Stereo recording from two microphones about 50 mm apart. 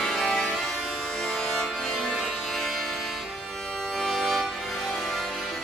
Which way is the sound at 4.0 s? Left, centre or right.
Centre.